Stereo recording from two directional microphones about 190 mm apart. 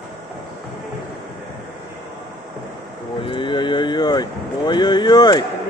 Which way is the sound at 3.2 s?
25° left (ahead or behind).